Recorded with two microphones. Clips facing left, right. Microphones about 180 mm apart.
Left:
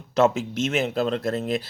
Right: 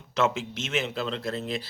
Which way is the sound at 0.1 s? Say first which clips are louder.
Left 6 dB; 40° left (ahead or behind).